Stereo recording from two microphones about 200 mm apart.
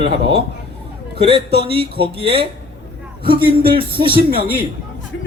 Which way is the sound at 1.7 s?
25° right (ahead or behind).